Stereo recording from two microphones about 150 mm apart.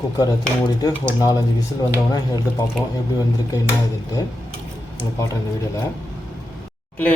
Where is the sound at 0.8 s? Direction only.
25° left (ahead or behind).